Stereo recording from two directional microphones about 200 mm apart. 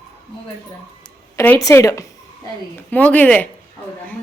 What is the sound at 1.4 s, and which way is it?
A woman's voice, 15° left (ahead or behind).